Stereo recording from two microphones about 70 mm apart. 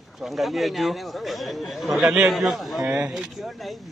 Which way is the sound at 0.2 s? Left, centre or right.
Centre.